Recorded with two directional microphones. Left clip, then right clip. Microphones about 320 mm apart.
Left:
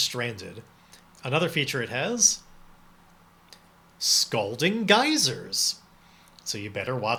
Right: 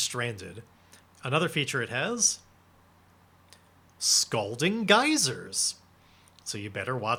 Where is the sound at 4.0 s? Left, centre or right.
Right.